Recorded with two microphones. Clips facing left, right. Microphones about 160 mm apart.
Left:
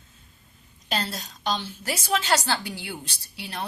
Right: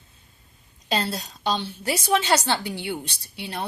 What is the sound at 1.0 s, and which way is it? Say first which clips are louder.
A woman's voice: right 3 dB; 30° right (ahead or behind).